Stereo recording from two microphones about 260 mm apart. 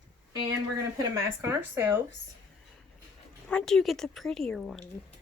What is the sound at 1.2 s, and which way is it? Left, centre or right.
Speech, centre.